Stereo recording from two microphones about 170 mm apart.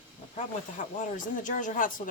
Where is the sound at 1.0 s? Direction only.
50° left (ahead or behind).